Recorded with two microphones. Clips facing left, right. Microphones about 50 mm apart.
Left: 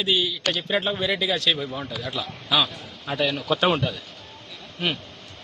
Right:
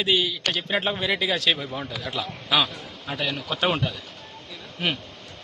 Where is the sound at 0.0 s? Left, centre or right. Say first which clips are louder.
Right 1 dB; right.